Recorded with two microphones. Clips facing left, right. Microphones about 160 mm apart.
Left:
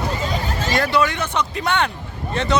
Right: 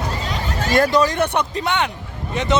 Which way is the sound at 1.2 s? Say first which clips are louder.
Right 4 dB; 60° right (ahead or behind).